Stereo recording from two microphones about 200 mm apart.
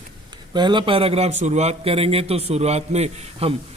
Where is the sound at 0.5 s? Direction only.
25° right (ahead or behind).